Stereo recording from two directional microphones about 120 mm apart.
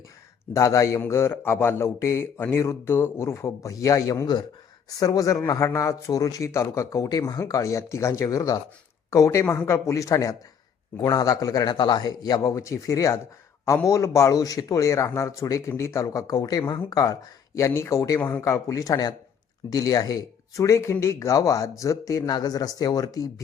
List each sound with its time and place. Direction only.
0.5 s a man's voice: 25° left (ahead or behind)